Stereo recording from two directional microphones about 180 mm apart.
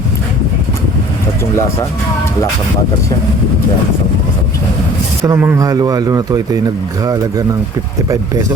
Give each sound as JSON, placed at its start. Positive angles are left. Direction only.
{"t": 5.2, "sound": "speech", "side_deg": -15}